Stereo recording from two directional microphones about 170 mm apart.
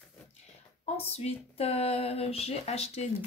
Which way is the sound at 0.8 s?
40° left (ahead or behind).